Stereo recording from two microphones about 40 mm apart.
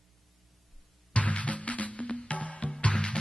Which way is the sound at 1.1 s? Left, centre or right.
Left.